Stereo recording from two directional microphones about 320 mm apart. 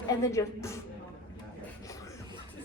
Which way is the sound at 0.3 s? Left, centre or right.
Centre.